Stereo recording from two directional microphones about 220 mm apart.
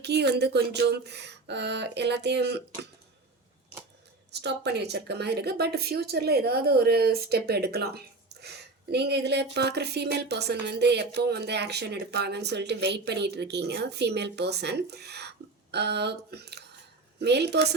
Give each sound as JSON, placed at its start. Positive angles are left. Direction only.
{"t": 0.0, "sound": "speech", "side_deg": -50}
{"t": 4.3, "sound": "speech", "side_deg": -50}